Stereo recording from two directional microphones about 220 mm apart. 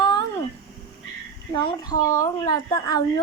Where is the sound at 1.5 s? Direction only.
20° left (ahead or behind).